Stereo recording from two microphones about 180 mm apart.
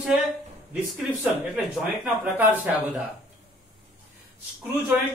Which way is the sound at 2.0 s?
10° right (ahead or behind).